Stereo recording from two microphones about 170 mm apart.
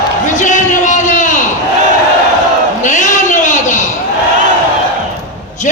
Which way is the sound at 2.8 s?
45° left (ahead or behind).